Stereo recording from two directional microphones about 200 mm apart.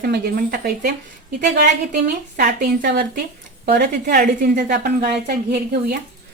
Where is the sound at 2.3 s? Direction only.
45° right (ahead or behind).